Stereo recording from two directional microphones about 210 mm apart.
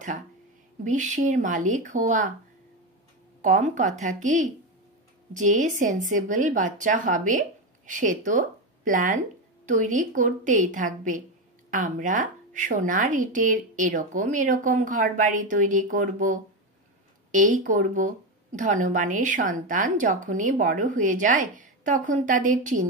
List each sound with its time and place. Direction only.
0.8 s speech: 35° right (ahead or behind)
3.4 s speech: 35° right (ahead or behind)